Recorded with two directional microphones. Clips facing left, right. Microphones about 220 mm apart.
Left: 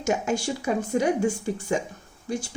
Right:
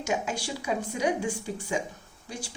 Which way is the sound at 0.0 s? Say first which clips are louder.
Left 5 dB; 45° left (ahead or behind).